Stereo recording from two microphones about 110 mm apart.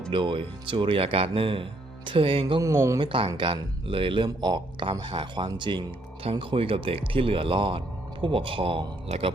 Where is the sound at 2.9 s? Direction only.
50° right (ahead or behind).